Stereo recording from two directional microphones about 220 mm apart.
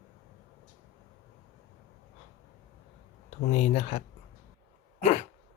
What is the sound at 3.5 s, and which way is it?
Speech, 30° left (ahead or behind).